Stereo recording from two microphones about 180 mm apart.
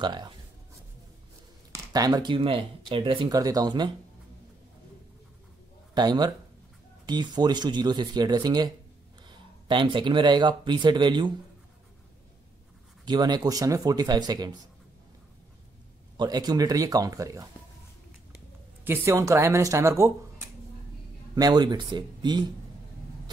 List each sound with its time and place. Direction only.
0.0 s speech: 25° right (ahead or behind)
1.7 s speech: 20° right (ahead or behind)
5.9 s speech: 20° right (ahead or behind)
13.0 s speech: 25° right (ahead or behind)
16.2 s speech: 20° right (ahead or behind)
18.9 s speech: 15° right (ahead or behind)